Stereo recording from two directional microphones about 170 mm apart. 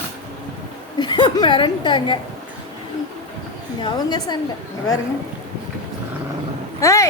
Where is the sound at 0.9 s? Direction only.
25° left (ahead or behind).